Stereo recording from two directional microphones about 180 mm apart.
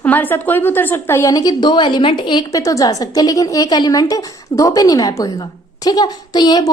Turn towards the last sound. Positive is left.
turn(degrees=20)  # may be behind; listen again after turning